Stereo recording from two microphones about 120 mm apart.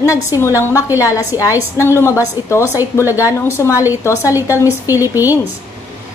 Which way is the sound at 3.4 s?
25° left (ahead or behind).